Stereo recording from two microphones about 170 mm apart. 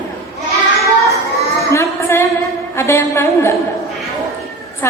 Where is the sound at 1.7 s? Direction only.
15° left (ahead or behind).